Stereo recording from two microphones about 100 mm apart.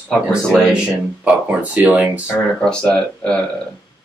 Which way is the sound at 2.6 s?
10° left (ahead or behind).